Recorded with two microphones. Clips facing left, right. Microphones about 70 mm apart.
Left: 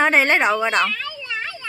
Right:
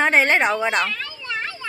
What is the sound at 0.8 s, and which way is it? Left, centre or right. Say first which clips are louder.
Children playing: left 2 dB; right.